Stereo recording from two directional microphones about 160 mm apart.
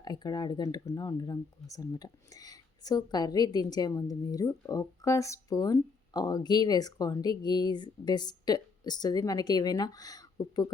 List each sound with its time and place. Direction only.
0.0 s speech: 25° left (ahead or behind)